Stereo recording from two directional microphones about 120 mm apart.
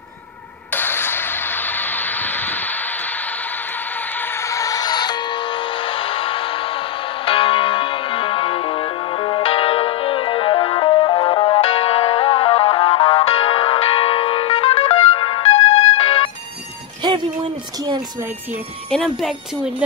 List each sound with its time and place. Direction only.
0.7 s music: 15° left (ahead or behind); by 15.6 s 45° left (ahead or behind)
17.0 s music: 40° right (ahead or behind)
18.9 s speech: centre (ahead or behind)